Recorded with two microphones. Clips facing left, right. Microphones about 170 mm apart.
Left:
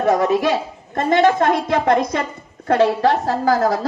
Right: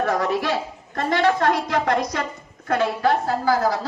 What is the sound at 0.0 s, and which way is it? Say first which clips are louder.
A woman's voice: left 6 dB; 20° left (ahead or behind).